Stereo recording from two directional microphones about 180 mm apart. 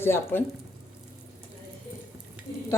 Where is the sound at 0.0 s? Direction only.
10° left (ahead or behind).